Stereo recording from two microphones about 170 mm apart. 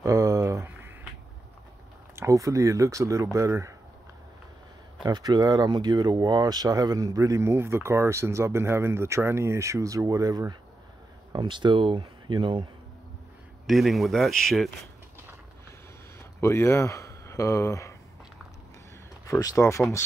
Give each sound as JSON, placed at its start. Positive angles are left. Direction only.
{"t": 0.0, "sound": "a sound", "side_deg": -20}
{"t": 2.1, "sound": "speech", "side_deg": -20}
{"t": 5.0, "sound": "speech", "side_deg": -25}
{"t": 13.7, "sound": "speech", "side_deg": 0}
{"t": 16.3, "sound": "speech", "side_deg": 15}
{"t": 19.2, "sound": "speech", "side_deg": 20}